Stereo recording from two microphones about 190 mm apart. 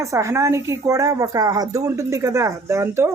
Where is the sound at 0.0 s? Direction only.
15° right (ahead or behind).